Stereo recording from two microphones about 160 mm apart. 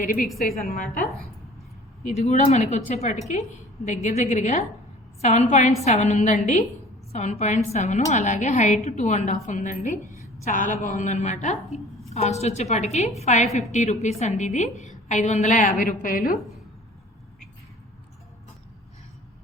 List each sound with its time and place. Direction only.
0.2 s a woman's voice: centre (ahead or behind)
0.7 s a woman's voice: 65° left (ahead or behind)
2.0 s a woman's voice: 45° left (ahead or behind); by 16.4 s 60° left (ahead or behind)